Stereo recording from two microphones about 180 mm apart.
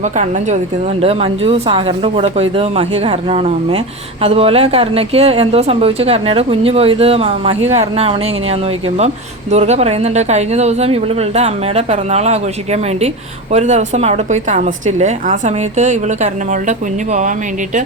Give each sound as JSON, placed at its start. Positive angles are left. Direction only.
{"t": 1.0, "sound": "a woman's voice", "side_deg": -35}
{"t": 9.5, "sound": "a woman's voice", "side_deg": -35}